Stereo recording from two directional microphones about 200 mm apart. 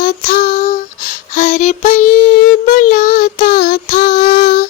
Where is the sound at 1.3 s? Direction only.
35° left (ahead or behind).